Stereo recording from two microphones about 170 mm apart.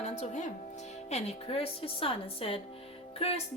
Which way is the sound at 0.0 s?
40° left (ahead or behind).